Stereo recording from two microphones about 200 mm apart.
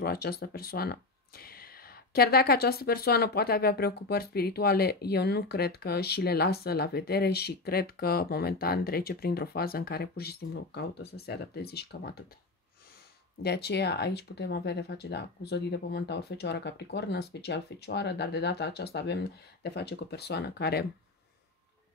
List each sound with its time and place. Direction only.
0.0 s speech: 50° left (ahead or behind)
13.4 s speech: 55° left (ahead or behind)